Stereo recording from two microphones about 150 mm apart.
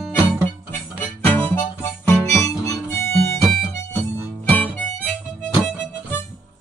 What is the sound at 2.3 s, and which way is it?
Harmonica, 20° left (ahead or behind).